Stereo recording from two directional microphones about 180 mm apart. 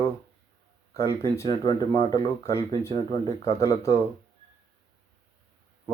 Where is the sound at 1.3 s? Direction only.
20° left (ahead or behind).